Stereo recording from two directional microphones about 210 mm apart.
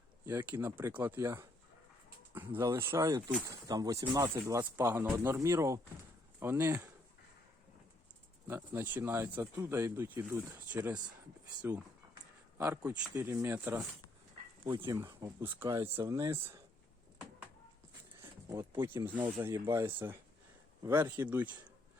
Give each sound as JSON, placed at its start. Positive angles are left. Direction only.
{"t": 0.3, "sound": "speech", "side_deg": -10}
{"t": 8.4, "sound": "speech", "side_deg": -10}
{"t": 12.5, "sound": "speech", "side_deg": -10}
{"t": 18.4, "sound": "speech", "side_deg": -15}